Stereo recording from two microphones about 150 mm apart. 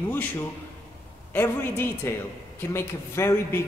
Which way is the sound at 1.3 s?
15° left (ahead or behind).